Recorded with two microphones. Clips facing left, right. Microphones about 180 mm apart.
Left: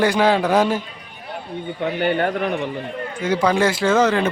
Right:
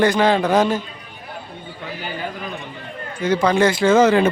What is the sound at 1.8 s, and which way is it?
Speech, 65° left (ahead or behind).